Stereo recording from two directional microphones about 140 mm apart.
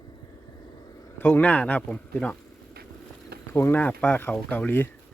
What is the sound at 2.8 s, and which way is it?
Vehicle, 90° right.